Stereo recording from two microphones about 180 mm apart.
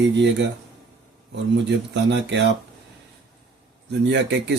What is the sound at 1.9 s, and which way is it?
Speech, 75° right (ahead or behind).